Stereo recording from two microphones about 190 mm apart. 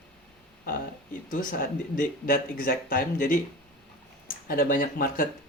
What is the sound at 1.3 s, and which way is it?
Speech, 45° left (ahead or behind).